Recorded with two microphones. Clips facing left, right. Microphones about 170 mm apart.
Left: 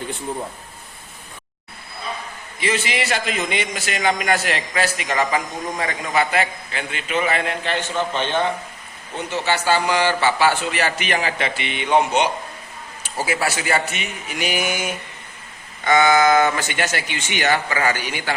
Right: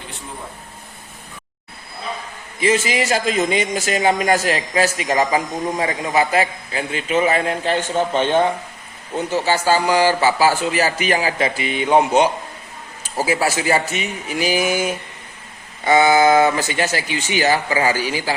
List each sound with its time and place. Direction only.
2.6 s a man's voice: 40° right (ahead or behind); by 6.1 s 25° right (ahead or behind)
6.1 s a man's voice: 35° right (ahead or behind)
9.5 s a man's voice: 35° right (ahead or behind)
16.1 s a man's voice: 30° right (ahead or behind)